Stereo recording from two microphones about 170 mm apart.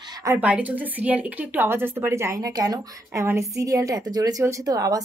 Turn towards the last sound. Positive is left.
turn(degrees=-20)  # may be behind; listen again after turning